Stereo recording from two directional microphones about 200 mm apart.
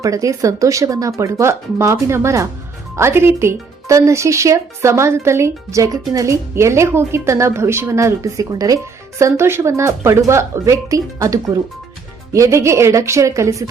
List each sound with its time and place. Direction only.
0.0 s speech: 15° right (ahead or behind)